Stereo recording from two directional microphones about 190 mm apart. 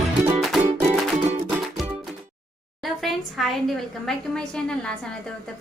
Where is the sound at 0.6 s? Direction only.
40° right (ahead or behind).